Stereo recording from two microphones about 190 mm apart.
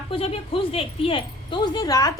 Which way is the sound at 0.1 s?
30° left (ahead or behind).